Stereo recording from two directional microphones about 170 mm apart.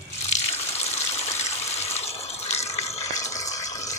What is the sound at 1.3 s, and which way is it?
Water, 40° left (ahead or behind).